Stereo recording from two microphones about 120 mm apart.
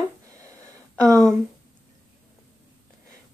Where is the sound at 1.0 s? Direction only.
30° right (ahead or behind).